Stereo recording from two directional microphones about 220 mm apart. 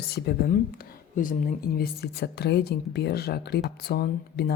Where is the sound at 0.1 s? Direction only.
45° left (ahead or behind).